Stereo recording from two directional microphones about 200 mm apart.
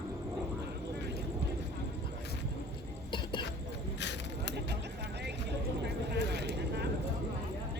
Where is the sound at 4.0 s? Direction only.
60° left (ahead or behind).